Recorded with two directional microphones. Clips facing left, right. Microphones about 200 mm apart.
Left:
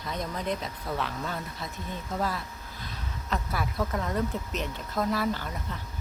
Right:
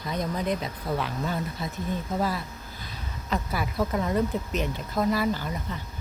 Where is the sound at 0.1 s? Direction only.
Centre (ahead or behind).